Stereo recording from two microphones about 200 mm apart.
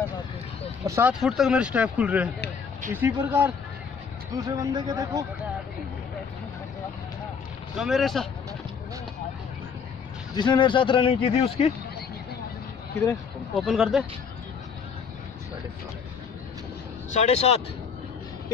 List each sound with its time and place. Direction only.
0.8 s speech: 15° right (ahead or behind)
1.2 s speech: centre (ahead or behind); by 5.2 s 20° right (ahead or behind)
7.7 s speech: centre (ahead or behind)
10.3 s speech: 20° left (ahead or behind)
13.6 s speech: centre (ahead or behind)
17.1 s speech: 35° left (ahead or behind)